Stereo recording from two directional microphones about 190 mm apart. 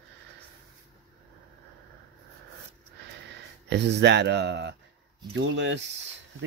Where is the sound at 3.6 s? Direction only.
65° right (ahead or behind).